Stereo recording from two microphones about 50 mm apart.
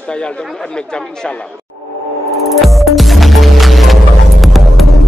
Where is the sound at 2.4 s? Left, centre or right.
Centre.